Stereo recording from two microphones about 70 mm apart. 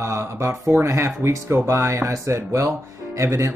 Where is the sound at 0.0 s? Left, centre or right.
Right.